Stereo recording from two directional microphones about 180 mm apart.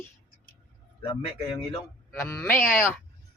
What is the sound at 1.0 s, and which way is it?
Speech, 25° left (ahead or behind).